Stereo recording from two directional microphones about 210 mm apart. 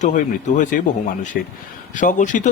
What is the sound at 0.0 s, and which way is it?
Speech, 35° left (ahead or behind).